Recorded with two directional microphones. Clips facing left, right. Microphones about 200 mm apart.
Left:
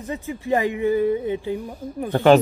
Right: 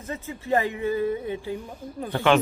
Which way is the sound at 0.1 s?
15° left (ahead or behind).